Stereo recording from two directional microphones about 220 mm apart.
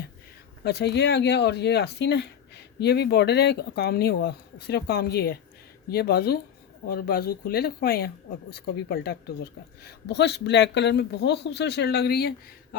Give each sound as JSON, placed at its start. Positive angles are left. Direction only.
{"t": 0.6, "sound": "speech", "side_deg": 45}